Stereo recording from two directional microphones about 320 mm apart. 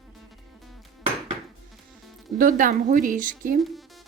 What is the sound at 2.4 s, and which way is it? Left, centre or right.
Speech, right.